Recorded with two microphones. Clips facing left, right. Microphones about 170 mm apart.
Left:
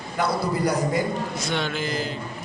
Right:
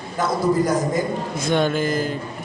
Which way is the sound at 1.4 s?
50° right (ahead or behind).